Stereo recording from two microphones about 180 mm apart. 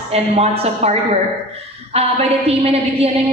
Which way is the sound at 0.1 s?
35° right (ahead or behind).